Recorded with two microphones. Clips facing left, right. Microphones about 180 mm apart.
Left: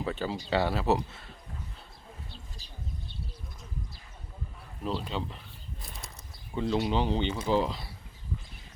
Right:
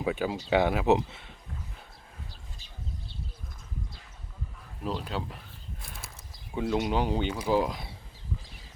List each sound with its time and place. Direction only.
0.0 s speech: 10° right (ahead or behind)
4.8 s speech: 5° right (ahead or behind)
5.8 s a sound: centre (ahead or behind)
6.5 s speech: 5° right (ahead or behind)